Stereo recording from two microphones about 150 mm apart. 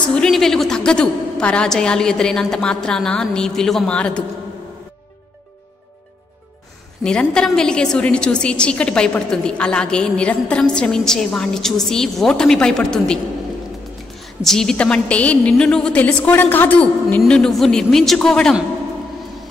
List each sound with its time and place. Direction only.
0.1 s a woman's voice: 5° left (ahead or behind)
7.0 s a woman's voice: 5° left (ahead or behind)
14.2 s a woman's voice: centre (ahead or behind)